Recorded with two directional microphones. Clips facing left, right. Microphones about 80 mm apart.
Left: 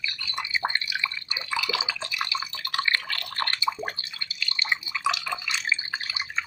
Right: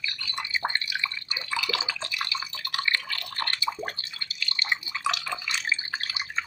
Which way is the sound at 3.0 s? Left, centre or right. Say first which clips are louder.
Left 2 dB; left.